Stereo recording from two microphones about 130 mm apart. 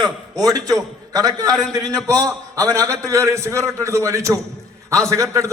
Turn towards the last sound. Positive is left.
turn(degrees=-25)  # may be behind; listen again after turning